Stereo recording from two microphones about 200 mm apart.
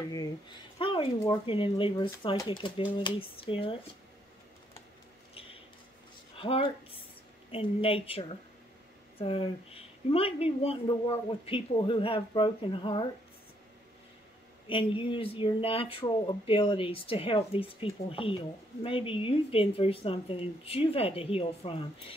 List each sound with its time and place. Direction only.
0.7 s speech: 25° left (ahead or behind)
5.3 s a sound: 30° left (ahead or behind)
6.3 s speech: 25° left (ahead or behind)
14.7 s speech: 25° left (ahead or behind)